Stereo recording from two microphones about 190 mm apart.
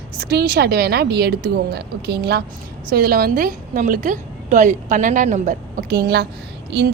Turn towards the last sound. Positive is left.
turn(degrees=-60)  # may be behind; listen again after turning